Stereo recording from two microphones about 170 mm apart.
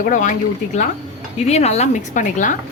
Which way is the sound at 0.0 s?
50° left (ahead or behind).